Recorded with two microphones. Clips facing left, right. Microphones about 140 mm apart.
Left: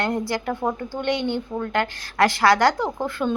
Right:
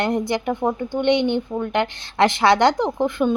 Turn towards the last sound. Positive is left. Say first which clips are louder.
# right 5 dB
turn(degrees=-20)  # may be behind; listen again after turning